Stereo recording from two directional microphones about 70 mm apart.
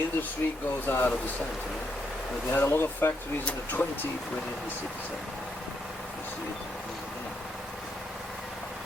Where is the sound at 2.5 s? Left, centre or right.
Left.